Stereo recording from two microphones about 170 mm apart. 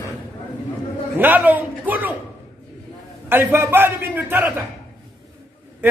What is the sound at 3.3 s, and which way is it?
A man's voice, 10° right (ahead or behind).